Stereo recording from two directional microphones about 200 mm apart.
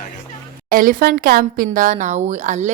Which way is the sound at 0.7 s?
45° right (ahead or behind).